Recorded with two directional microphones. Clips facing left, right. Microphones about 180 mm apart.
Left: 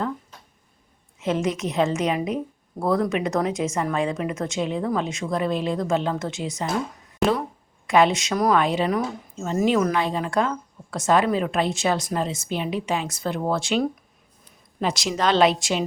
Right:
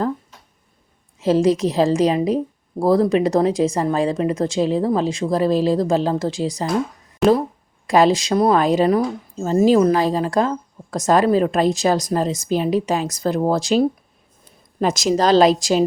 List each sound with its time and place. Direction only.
1.2 s speech: 35° right (ahead or behind)
7.2 s speech: centre (ahead or behind)
7.9 s speech: 35° right (ahead or behind)